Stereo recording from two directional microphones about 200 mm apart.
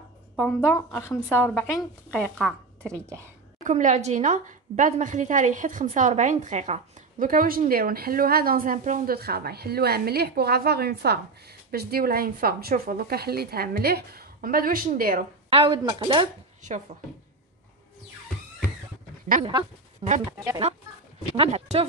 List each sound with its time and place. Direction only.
0.4 s speech: 10° left (ahead or behind)
2.9 s speech: 15° right (ahead or behind)
3.6 s a woman's voice: 35° right (ahead or behind)
15.5 s speech: 25° right (ahead or behind)
19.4 s speech: 30° right (ahead or behind)
20.2 s speech: 20° right (ahead or behind)
21.4 s speech: 30° right (ahead or behind)